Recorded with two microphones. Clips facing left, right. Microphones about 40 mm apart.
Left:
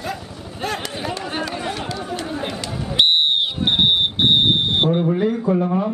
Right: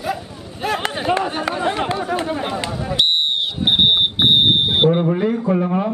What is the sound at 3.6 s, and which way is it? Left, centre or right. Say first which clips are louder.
Smoke detector: right 3 dB; centre.